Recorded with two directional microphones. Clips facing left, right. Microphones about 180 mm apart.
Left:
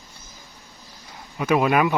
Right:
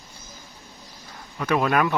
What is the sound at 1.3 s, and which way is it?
Speech, 10° left (ahead or behind).